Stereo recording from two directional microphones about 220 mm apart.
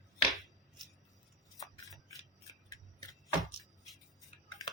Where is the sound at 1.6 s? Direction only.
15° left (ahead or behind).